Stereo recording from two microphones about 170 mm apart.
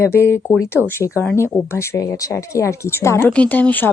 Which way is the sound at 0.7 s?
10° right (ahead or behind).